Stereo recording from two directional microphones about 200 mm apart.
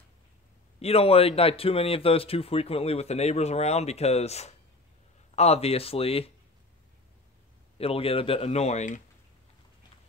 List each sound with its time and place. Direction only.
0.7 s speech: 30° left (ahead or behind)
7.7 s speech: 30° left (ahead or behind)